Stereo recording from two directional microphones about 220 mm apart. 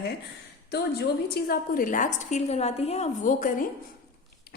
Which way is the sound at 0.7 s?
45° left (ahead or behind).